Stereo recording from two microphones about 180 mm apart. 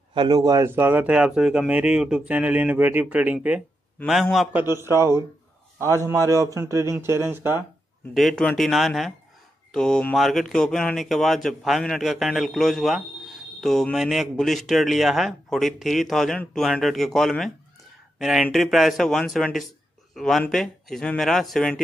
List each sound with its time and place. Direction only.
0.1 s speech: 25° right (ahead or behind)
8.1 s speech: centre (ahead or behind)